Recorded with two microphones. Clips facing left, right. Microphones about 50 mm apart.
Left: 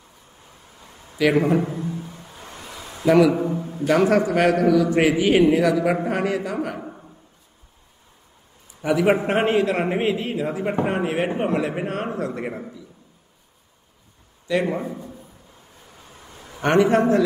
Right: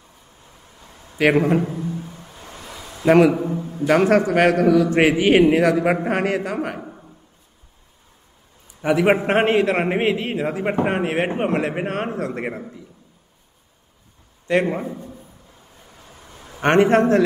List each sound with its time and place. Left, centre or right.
1.1 s a man's voice: right
1.6 s a man's voice: centre
2.2 s a sound: centre
3.1 s a man's voice: right
8.8 s a man's voice: right
14.5 s a man's voice: right
14.9 s a man's voice: centre
16.6 s a man's voice: right